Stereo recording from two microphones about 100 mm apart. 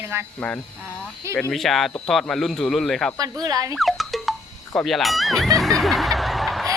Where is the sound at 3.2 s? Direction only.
40° right (ahead or behind).